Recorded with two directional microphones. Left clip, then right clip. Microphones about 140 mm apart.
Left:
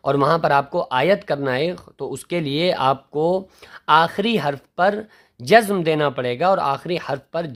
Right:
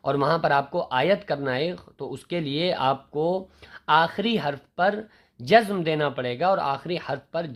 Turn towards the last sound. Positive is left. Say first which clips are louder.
# left 4 dB
turn(degrees=40)  # may be behind; listen again after turning